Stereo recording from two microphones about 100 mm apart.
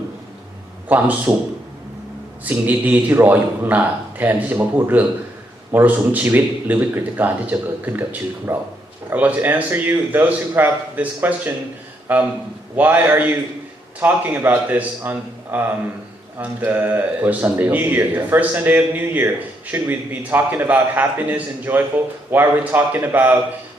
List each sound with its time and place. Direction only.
0.9 s speech: 15° right (ahead or behind)
2.4 s a man's voice: 15° right (ahead or behind)